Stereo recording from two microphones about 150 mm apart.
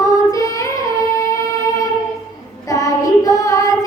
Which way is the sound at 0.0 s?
20° left (ahead or behind).